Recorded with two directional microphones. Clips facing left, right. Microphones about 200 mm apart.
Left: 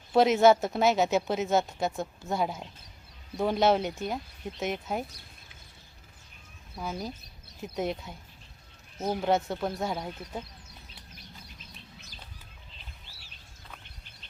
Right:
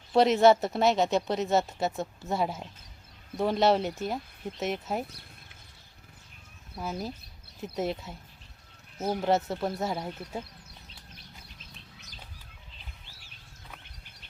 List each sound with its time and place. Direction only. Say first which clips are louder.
0.1 s speech: even; centre (ahead or behind)
6.7 s speech: right 1 dB; 5° right (ahead or behind)